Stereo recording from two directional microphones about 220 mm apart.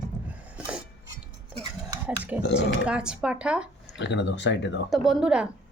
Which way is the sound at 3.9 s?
55° left (ahead or behind).